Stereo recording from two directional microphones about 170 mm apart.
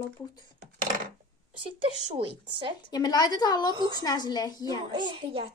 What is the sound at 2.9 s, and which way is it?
Speech, 25° left (ahead or behind).